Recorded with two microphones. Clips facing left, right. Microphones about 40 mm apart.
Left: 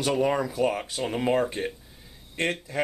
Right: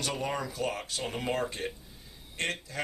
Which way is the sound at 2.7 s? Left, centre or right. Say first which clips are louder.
Left 8 dB; left.